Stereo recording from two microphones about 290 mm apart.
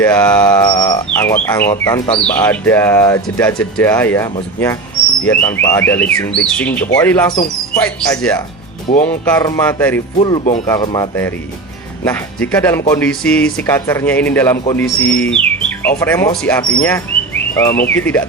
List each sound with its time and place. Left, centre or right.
0.0 s speech: centre
2.2 s music: centre
6.6 s speech: centre
6.9 s music: centre
7.9 s speech: centre
9.0 s music: centre
10.2 s music: centre
12.0 s speech: centre
12.9 s music: centre